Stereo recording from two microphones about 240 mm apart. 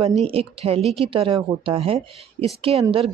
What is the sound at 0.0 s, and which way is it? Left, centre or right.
Speech, right.